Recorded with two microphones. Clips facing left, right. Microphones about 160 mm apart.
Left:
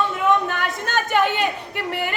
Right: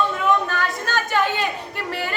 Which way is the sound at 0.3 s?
20° left (ahead or behind).